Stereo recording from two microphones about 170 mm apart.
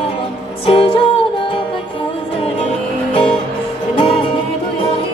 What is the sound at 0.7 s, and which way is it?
Music, 30° left (ahead or behind).